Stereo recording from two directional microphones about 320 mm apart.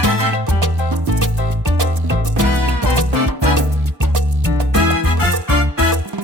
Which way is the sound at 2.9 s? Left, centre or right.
Right.